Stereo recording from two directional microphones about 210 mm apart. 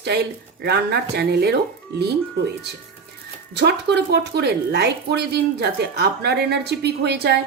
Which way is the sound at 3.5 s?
55° right (ahead or behind).